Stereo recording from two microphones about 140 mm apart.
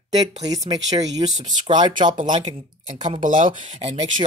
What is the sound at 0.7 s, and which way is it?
Speech, 30° right (ahead or behind).